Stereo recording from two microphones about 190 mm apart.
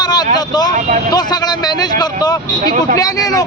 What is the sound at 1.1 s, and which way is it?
Vehicle, 20° left (ahead or behind).